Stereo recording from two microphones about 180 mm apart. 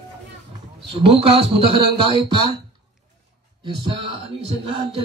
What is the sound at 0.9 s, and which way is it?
Speech, 30° right (ahead or behind).